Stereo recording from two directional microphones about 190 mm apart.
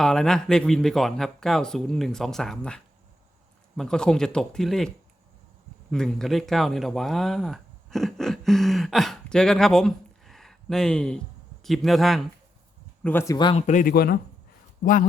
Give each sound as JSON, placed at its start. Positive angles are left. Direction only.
{"t": 0.0, "sound": "speech", "side_deg": 0}
{"t": 5.9, "sound": "speech", "side_deg": 5}